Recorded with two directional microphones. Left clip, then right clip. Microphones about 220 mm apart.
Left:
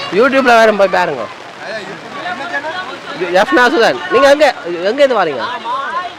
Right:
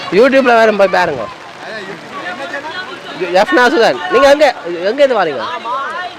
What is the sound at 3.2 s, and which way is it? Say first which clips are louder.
Speech: even; 5° right (ahead or behind).